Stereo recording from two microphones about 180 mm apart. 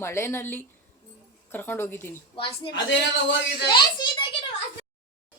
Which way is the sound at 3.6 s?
25° left (ahead or behind).